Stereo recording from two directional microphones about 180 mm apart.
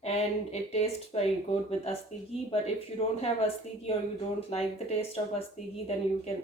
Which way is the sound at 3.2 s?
35° left (ahead or behind).